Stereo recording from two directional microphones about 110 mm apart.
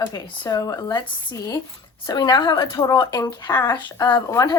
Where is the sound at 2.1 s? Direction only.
40° left (ahead or behind).